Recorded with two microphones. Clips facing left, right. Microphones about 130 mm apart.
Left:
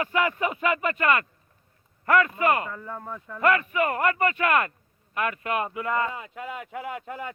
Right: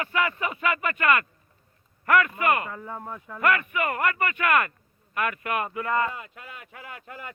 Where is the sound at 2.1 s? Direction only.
25° left (ahead or behind).